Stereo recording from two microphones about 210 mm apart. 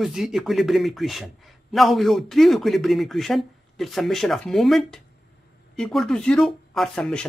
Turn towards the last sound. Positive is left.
turn(degrees=5)  # may be behind; listen again after turning